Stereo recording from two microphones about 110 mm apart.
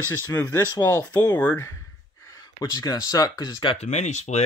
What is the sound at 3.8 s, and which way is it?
Speech, 90° left.